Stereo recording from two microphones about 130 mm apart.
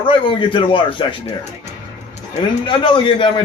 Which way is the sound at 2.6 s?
40° left (ahead or behind).